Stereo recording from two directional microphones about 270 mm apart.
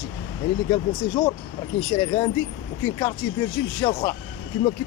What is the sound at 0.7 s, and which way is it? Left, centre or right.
Speech, centre.